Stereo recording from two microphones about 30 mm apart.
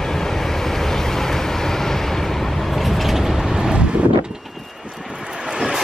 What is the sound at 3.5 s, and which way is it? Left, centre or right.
Wind noise, right.